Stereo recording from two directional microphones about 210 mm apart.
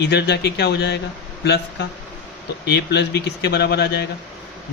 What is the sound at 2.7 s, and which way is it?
Speech, 50° left (ahead or behind).